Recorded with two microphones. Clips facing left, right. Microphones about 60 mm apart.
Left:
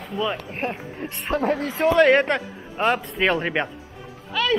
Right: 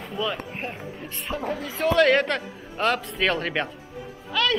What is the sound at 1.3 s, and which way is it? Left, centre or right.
Speech, left.